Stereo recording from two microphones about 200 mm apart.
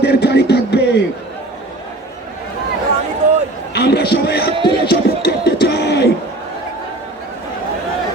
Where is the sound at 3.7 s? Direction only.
55° left (ahead or behind).